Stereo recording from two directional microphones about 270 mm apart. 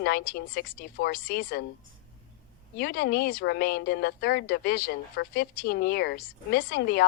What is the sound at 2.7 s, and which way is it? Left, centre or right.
Speech, left.